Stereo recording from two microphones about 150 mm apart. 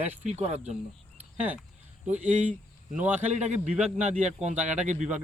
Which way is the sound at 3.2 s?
50° right (ahead or behind).